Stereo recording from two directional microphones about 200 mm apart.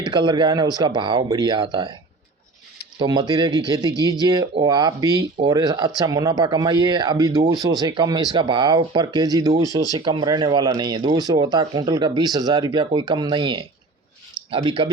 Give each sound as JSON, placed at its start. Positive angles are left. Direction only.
{"t": 0.1, "sound": "speech", "side_deg": -25}
{"t": 3.0, "sound": "speech", "side_deg": -20}